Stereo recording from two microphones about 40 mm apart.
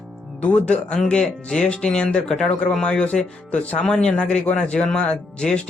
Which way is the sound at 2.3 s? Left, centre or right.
Centre.